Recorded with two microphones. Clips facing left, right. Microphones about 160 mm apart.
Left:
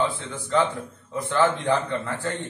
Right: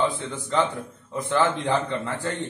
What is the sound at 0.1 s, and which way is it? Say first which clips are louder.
A man's voice: left 2 dB; 20° right (ahead or behind).